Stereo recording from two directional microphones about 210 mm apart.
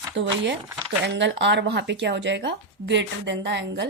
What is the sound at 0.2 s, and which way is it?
Speech, 60° right (ahead or behind).